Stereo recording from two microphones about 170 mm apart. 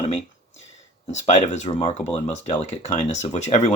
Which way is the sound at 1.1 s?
40° left (ahead or behind).